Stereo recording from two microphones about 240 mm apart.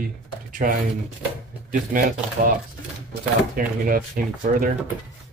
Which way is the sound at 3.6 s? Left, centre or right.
Right.